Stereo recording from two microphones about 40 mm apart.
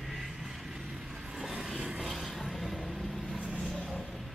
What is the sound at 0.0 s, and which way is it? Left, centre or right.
Vehicle, centre.